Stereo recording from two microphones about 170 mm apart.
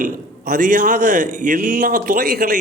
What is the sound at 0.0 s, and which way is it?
A man's voice, 60° right (ahead or behind).